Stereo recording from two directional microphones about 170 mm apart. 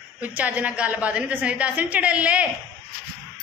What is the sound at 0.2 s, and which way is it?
A woman's voice, 10° right (ahead or behind).